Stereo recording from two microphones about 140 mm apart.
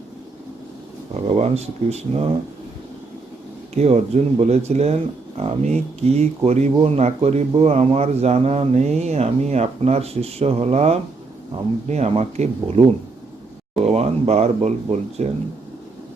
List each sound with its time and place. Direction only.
1.1 s speech: 50° right (ahead or behind)
3.8 s speech: 50° right (ahead or behind)
13.8 s speech: 50° right (ahead or behind)